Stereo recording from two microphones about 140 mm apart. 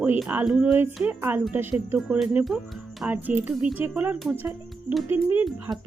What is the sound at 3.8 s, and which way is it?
Speech, 15° right (ahead or behind).